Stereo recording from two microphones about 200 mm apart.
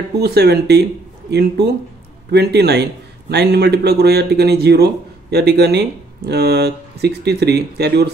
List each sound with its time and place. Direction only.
0.2 s a man's voice: 55° right (ahead or behind)